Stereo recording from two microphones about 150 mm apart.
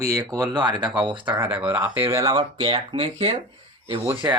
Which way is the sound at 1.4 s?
10° right (ahead or behind).